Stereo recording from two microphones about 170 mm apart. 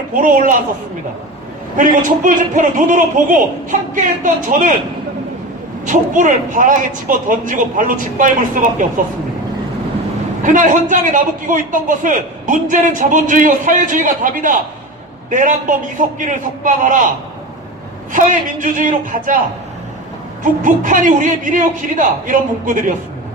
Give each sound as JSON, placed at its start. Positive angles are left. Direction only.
{"t": 0.1, "sound": "a man's voice", "side_deg": -50}
{"t": 1.7, "sound": "a man's voice", "side_deg": -50}
{"t": 5.8, "sound": "a man's voice", "side_deg": -50}
{"t": 10.4, "sound": "a man's voice", "side_deg": -50}
{"t": 18.1, "sound": "a man's voice", "side_deg": -50}
{"t": 20.4, "sound": "a man's voice", "side_deg": -50}